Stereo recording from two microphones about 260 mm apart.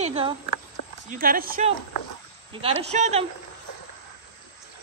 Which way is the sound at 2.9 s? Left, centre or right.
Right.